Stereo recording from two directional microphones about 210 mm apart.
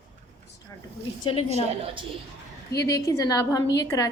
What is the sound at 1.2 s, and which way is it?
Speech, 25° left (ahead or behind).